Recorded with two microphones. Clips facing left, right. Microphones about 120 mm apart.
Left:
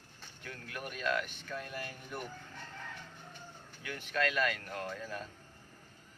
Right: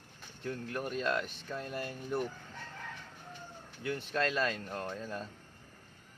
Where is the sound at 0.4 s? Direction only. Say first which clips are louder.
Right 7 dB; 30° right (ahead or behind).